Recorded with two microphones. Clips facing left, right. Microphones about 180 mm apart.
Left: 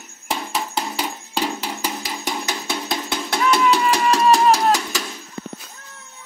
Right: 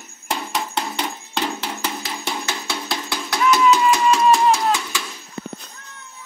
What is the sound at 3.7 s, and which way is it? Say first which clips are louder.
Music: right 2 dB; 35° left (ahead or behind).